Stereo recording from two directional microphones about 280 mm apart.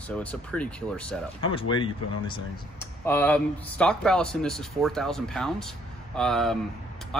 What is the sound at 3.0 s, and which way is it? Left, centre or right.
Speech, centre.